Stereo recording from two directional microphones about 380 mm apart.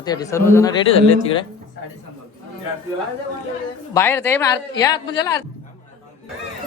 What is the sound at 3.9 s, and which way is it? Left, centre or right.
Speech, centre.